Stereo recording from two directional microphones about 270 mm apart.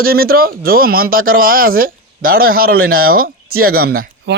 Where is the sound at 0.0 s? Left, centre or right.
Right.